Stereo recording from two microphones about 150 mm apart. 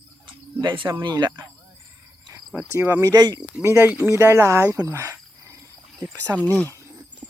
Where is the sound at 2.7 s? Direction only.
20° right (ahead or behind).